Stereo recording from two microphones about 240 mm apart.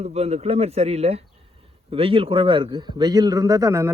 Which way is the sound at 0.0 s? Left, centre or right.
Right.